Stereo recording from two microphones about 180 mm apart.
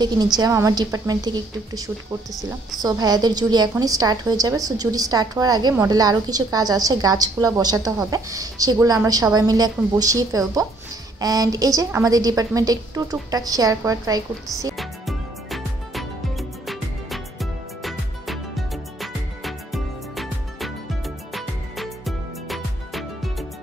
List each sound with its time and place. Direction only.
0.0 s a woman's voice: 25° right (ahead or behind)
14.8 s music: centre (ahead or behind)